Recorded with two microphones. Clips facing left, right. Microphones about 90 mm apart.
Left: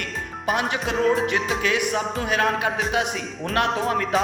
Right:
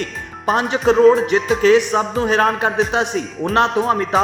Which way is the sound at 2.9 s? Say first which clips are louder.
Right 5 dB; 25° right (ahead or behind).